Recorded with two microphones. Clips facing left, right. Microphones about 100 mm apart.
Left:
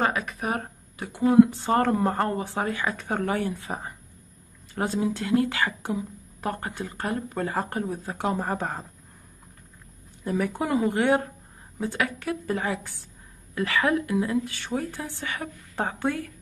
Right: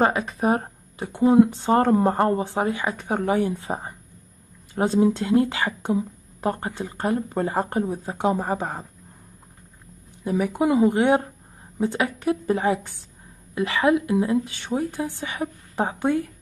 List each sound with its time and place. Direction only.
0.0 s a woman's voice: 25° right (ahead or behind)
10.2 s a woman's voice: 15° right (ahead or behind)